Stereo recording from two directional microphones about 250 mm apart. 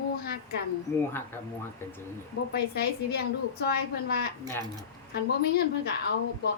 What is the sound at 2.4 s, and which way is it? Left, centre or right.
Speech, left.